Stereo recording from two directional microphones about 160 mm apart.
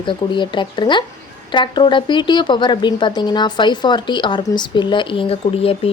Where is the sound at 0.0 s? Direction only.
30° left (ahead or behind).